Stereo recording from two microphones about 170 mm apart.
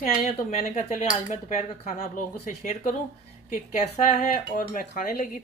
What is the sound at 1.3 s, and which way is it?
Speech, 45° left (ahead or behind).